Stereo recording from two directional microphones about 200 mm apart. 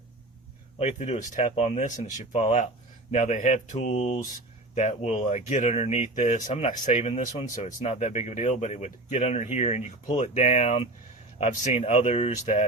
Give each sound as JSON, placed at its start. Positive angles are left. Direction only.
{"t": 0.8, "sound": "speech", "side_deg": 35}